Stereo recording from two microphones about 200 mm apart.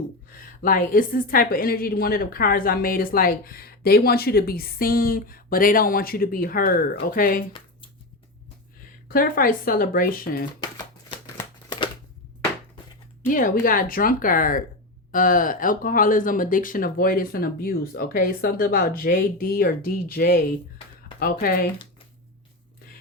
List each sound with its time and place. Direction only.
0.3 s a woman's voice: 45° left (ahead or behind)
9.0 s a woman's voice: 45° left (ahead or behind)
11.1 s a sound: 25° left (ahead or behind)
13.2 s a woman's voice: 45° left (ahead or behind)